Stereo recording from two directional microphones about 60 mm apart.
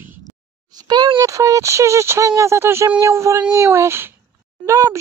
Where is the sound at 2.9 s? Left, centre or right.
Right.